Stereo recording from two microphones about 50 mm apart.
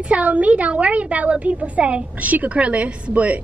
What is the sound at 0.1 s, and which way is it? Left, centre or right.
A woman's voice, right.